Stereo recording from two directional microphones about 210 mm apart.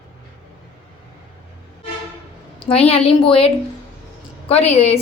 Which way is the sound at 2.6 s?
25° left (ahead or behind).